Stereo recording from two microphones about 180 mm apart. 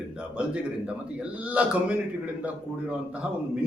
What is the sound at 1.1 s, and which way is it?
Mantra, 5° right (ahead or behind).